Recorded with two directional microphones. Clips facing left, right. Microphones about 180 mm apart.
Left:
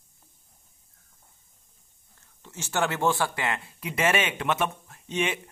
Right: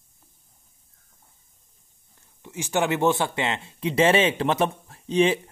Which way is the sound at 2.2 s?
15° right (ahead or behind).